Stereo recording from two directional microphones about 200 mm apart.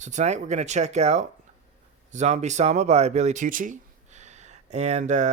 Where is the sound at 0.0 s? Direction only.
35° right (ahead or behind).